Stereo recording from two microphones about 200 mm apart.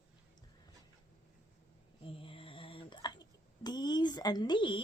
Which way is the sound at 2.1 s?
25° left (ahead or behind).